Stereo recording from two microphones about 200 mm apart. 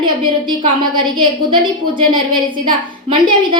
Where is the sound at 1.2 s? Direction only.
25° right (ahead or behind).